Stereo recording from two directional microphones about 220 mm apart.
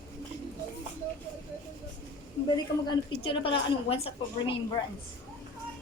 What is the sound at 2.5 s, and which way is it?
A woman's voice, 20° left (ahead or behind).